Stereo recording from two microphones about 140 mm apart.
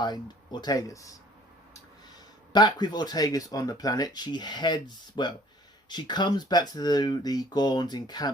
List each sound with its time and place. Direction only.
0.6 s speech: 25° left (ahead or behind)
2.5 s speech: 30° left (ahead or behind)